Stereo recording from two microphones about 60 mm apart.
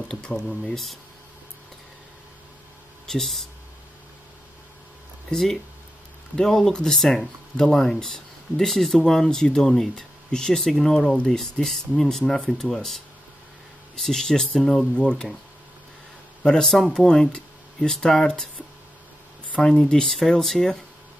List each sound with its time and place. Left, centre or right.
0.1 s speech: centre
3.1 s speech: centre
5.3 s speech: centre
15.0 s speech: centre
16.4 s speech: centre
19.7 s speech: centre